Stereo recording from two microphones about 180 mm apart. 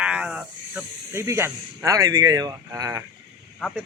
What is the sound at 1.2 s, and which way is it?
Speech, 15° right (ahead or behind).